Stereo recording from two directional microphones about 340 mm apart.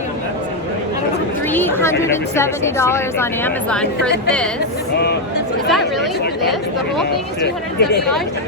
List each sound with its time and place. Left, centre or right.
1.5 s a woman's voice: centre
7.4 s speech: left